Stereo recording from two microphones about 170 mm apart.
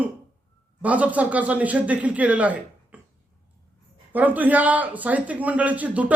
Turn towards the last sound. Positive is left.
turn(degrees=-10)  # may be behind; listen again after turning